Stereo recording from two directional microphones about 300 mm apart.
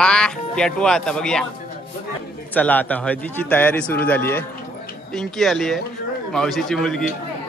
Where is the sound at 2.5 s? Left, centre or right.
Centre.